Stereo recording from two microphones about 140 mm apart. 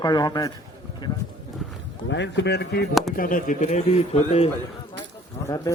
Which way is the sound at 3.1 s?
75° left (ahead or behind).